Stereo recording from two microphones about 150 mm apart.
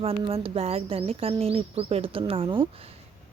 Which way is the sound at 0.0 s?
35° right (ahead or behind).